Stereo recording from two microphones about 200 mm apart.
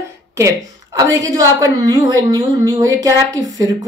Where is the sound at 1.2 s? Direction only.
15° right (ahead or behind).